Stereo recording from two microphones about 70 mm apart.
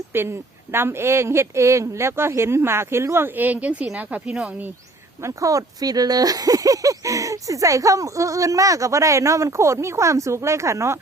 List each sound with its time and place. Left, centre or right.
0.1 s speech: right; by 4.5 s centre
5.2 s speech: right